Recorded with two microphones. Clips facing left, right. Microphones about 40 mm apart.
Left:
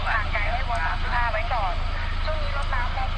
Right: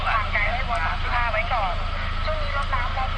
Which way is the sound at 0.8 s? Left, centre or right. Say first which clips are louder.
Right 1 dB; centre.